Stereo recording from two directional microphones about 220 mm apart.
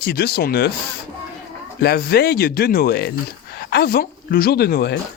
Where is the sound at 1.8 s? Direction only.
45° left (ahead or behind).